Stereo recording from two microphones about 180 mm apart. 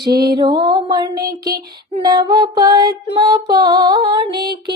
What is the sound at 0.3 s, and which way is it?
Music, 25° right (ahead or behind).